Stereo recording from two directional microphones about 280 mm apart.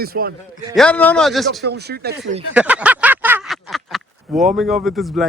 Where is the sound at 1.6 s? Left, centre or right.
Right.